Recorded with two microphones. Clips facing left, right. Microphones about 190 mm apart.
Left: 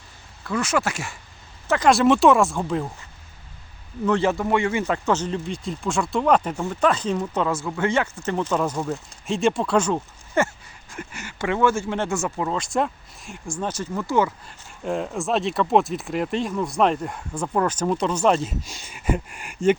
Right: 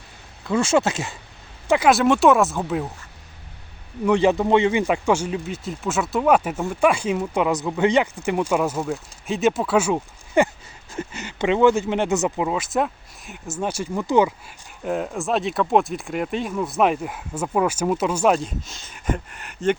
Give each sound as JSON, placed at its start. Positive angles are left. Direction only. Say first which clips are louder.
{"t": 0.4, "sound": "speech", "louder": "right 4 dB", "side_deg": -25}
{"t": 1.9, "sound": "speech", "louder": "left 1 dB", "side_deg": 0}
{"t": 4.0, "sound": "speech", "louder": "right 3 dB", "side_deg": -15}
{"t": 12.5, "sound": "speech", "louder": "right 1 dB", "side_deg": -5}
{"t": 14.8, "sound": "speech", "louder": "right 1 dB", "side_deg": -5}
{"t": 18.4, "sound": "speech", "louder": "left 1 dB", "side_deg": 10}